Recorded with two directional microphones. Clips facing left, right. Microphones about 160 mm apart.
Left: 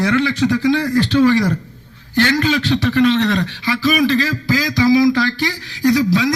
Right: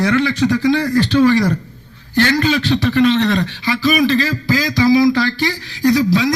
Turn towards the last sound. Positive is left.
turn(degrees=-30)  # may be behind; listen again after turning